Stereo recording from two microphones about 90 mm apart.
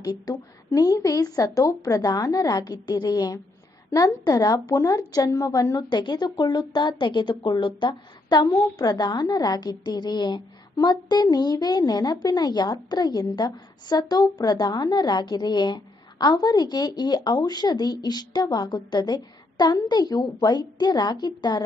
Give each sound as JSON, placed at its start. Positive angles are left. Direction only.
{"t": 0.0, "sound": "a woman's voice", "side_deg": 45}